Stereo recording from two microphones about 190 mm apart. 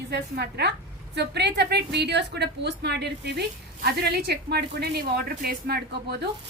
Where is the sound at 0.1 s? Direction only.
60° right (ahead or behind).